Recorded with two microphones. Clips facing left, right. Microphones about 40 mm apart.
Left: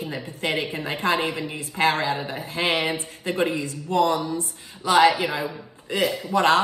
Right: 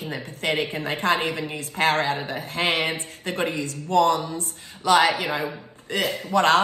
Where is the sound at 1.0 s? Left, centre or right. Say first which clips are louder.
Even; right.